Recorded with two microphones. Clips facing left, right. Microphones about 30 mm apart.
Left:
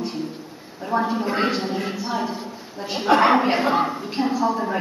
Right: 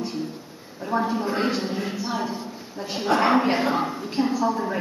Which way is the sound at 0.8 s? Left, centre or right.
Centre.